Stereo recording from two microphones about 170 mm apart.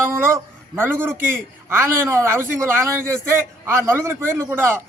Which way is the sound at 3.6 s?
15° right (ahead or behind).